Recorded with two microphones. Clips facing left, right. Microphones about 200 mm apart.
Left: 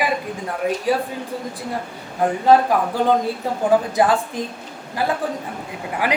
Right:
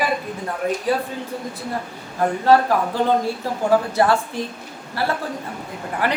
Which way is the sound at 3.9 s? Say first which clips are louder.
Even; 15° left (ahead or behind).